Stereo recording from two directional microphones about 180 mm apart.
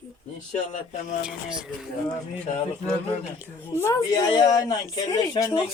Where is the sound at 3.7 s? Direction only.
15° left (ahead or behind).